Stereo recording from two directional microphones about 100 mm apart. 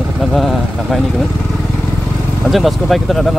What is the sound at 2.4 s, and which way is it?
Speech, centre (ahead or behind).